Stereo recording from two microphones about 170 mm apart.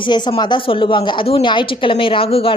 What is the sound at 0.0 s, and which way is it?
A woman's voice, 30° left (ahead or behind).